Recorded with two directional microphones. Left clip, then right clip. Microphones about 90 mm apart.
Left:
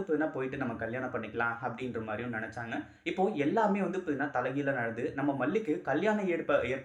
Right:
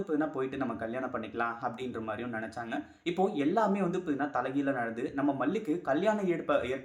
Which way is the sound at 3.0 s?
50° right (ahead or behind).